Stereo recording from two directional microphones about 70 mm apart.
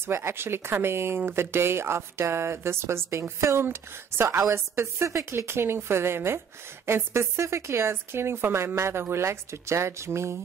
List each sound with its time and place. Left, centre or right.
0.0 s speech: right